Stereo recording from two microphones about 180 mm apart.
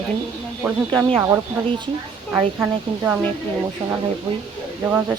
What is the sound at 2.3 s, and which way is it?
Speech, 10° right (ahead or behind).